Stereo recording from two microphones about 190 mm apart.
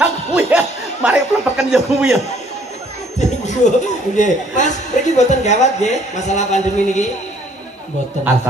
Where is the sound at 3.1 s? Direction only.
40° left (ahead or behind).